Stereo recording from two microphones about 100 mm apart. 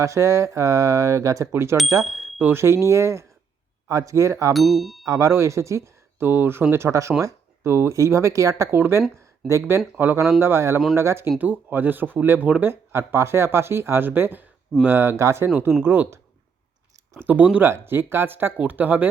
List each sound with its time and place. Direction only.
0.0 s speech: 30° right (ahead or behind)
2.0 s bicycle bell: centre (ahead or behind)
2.4 s speech: 25° right (ahead or behind)
4.5 s speech: centre (ahead or behind)
5.0 s speech: 30° right (ahead or behind)